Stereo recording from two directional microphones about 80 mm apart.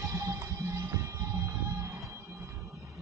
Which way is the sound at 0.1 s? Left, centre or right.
Right.